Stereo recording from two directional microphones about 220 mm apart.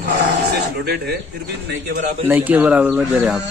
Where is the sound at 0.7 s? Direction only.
50° right (ahead or behind).